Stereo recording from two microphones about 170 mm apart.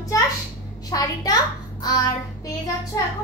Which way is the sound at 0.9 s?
20° left (ahead or behind).